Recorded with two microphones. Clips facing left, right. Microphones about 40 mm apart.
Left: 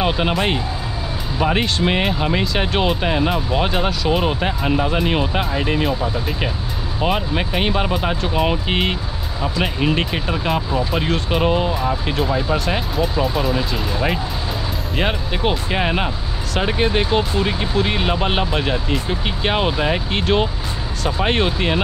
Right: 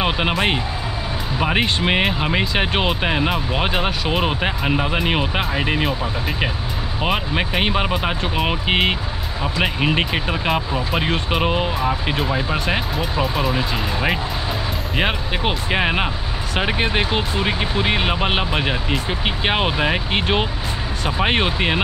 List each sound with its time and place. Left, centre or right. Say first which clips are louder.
1.4 s speech: left 1 dB; centre
7.0 s speech: left 1 dB; centre
13.2 s speech: right 1 dB; centre
13.5 s speech: even; centre